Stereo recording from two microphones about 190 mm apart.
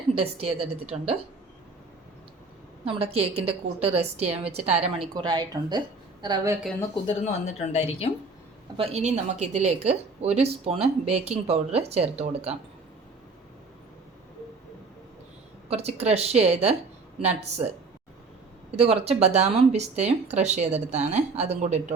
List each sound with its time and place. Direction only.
0.1 s a woman's voice: 30° right (ahead or behind)
2.8 s a woman's voice: 30° right (ahead or behind)
6.9 s speech: 30° left (ahead or behind)
8.8 s a woman's voice: 35° right (ahead or behind)
15.7 s a woman's voice: 35° right (ahead or behind)
18.8 s a woman's voice: 30° right (ahead or behind)